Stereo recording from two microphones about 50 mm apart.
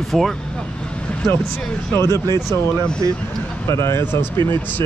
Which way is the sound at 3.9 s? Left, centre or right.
Left.